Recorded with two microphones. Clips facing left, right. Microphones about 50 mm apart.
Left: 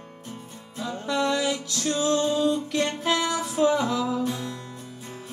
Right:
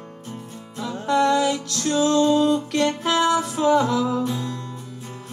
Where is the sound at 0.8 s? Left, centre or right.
Right.